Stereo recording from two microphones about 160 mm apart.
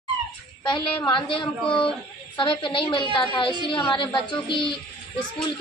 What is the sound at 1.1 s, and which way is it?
A woman's voice, 30° left (ahead or behind).